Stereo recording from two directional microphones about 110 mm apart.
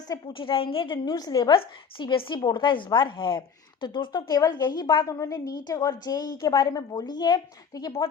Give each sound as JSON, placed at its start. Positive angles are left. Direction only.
{"t": 0.3, "sound": "a woman's voice", "side_deg": 55}
{"t": 1.5, "sound": "a woman's voice", "side_deg": 50}
{"t": 5.0, "sound": "a woman's voice", "side_deg": 30}